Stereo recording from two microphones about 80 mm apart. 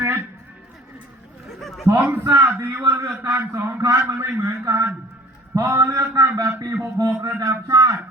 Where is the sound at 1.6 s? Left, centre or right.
Centre.